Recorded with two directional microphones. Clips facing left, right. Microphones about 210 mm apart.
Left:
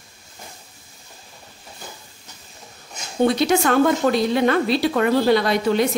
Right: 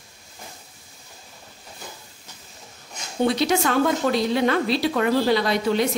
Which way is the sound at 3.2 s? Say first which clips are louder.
Left 3 dB; 50° left (ahead or behind).